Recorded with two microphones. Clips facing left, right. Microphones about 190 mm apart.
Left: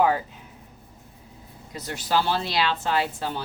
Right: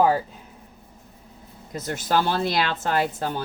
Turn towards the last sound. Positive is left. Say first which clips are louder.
# right 2 dB
turn(degrees=-50)  # may be behind; listen again after turning